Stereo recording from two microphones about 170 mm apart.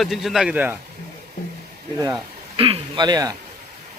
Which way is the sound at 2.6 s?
30° right (ahead or behind).